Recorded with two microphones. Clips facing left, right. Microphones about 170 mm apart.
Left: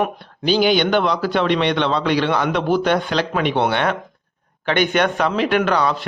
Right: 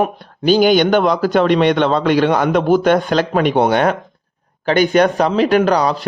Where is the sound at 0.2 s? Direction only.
45° right (ahead or behind).